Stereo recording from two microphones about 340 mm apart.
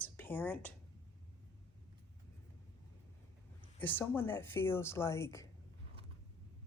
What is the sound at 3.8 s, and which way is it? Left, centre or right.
Speech, centre.